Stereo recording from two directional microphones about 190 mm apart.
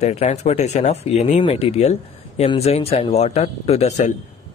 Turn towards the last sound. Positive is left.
turn(degrees=35)  # may be behind; listen again after turning